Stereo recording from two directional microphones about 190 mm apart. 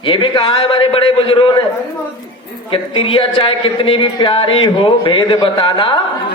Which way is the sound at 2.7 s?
30° left (ahead or behind).